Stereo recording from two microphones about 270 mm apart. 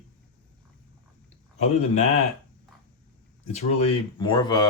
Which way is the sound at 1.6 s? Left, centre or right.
Left.